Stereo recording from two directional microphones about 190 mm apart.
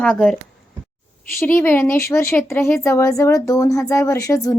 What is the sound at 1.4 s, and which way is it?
Speech, 10° left (ahead or behind).